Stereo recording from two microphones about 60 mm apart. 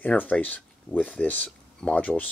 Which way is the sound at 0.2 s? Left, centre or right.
Left.